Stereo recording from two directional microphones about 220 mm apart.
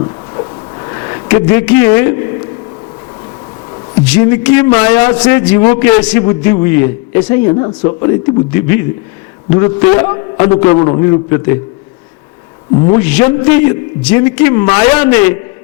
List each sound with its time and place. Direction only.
0.0 s a sound: 25° left (ahead or behind)
4.0 s a man's voice: 10° left (ahead or behind)
7.5 s a man's voice: 25° left (ahead or behind)
12.8 s a man's voice: 10° left (ahead or behind)